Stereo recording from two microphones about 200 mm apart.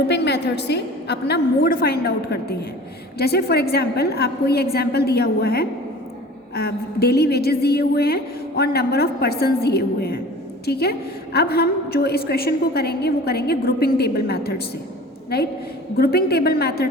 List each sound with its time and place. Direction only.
0.1 s a woman's voice: 55° left (ahead or behind)
16.0 s a woman's voice: 50° left (ahead or behind)